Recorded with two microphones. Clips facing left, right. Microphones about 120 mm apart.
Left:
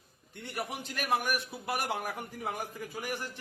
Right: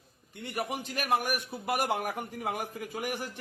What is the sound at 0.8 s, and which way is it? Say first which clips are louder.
A man's voice: right 1 dB; 55° right (ahead or behind).